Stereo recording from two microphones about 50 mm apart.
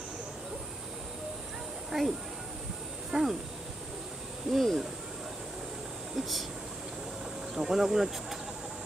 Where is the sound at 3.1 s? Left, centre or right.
Centre.